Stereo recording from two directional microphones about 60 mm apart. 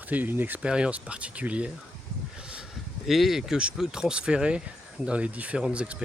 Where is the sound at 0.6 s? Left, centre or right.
Centre.